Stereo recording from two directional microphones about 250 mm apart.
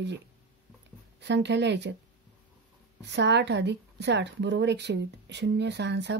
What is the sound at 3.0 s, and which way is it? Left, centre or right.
A woman's voice, right.